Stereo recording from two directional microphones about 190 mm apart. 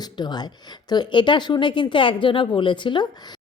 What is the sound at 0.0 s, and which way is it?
Speech, 20° left (ahead or behind).